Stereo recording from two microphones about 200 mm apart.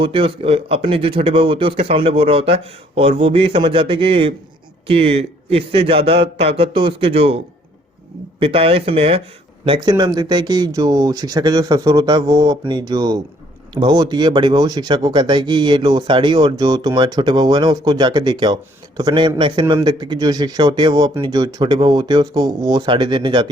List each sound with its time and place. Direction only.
0.0 s speech: 25° right (ahead or behind)